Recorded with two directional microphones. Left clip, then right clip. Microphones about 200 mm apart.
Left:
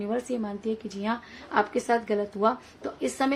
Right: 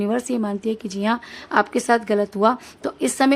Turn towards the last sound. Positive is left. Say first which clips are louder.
# right 8 dB
turn(degrees=-50)  # may be behind; listen again after turning